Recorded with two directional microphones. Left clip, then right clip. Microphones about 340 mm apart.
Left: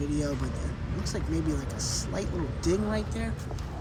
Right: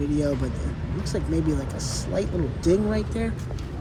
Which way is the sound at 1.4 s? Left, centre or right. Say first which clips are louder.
Right 4 dB; left.